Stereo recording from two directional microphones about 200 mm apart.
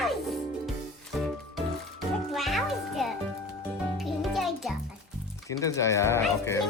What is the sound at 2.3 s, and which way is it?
Music, centre (ahead or behind).